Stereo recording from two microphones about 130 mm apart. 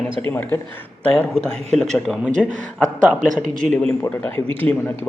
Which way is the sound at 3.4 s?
90° right.